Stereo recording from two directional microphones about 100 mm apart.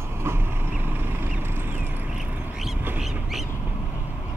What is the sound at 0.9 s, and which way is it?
Vehicle, 20° right (ahead or behind).